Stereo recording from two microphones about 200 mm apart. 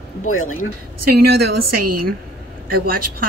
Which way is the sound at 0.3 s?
90° left.